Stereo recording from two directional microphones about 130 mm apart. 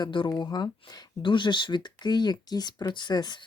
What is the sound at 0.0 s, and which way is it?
Speech, 35° left (ahead or behind).